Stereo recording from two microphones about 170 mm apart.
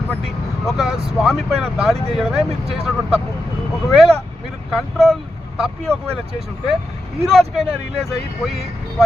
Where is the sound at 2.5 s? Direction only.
35° right (ahead or behind).